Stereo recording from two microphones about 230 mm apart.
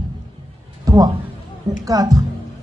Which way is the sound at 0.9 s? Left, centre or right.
Centre.